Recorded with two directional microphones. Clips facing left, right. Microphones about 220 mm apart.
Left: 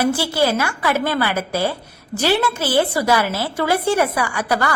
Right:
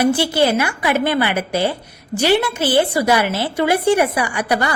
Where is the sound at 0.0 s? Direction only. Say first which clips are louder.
Right 3 dB; 15° right (ahead or behind).